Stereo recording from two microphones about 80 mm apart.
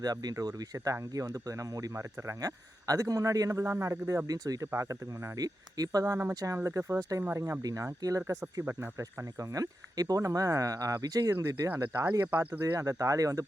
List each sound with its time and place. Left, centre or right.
0.0 s speech: right
5.4 s speech: right
6.6 s speech: right
11.7 s speech: right
12.7 s speech: right